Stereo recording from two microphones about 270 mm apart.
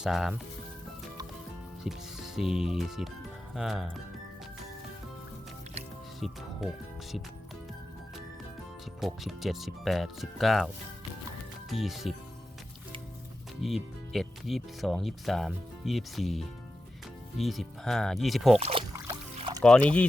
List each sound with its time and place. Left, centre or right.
0.0 s speech: centre
1.8 s speech: centre
6.1 s speech: centre
9.0 s speech: centre
11.7 s speech: centre
13.6 s speech: centre
18.6 s a sound: centre
19.4 s music: centre
19.6 s speech: centre